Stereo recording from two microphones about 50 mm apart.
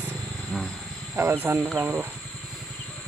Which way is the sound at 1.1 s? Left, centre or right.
Right.